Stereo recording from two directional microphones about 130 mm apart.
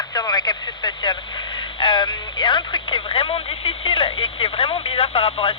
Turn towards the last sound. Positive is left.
turn(degrees=50)  # may be behind; listen again after turning